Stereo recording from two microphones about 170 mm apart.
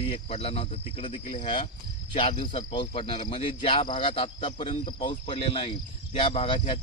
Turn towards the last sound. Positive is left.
turn(degrees=30)  # may be behind; listen again after turning